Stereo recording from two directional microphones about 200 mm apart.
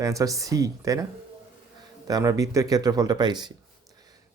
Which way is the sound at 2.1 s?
20° right (ahead or behind).